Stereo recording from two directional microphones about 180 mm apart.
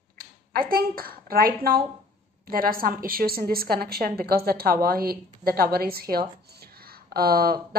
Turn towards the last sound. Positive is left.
turn(degrees=-55)  # may be behind; listen again after turning